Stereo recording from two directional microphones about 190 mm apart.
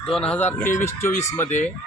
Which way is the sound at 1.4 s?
40° left (ahead or behind).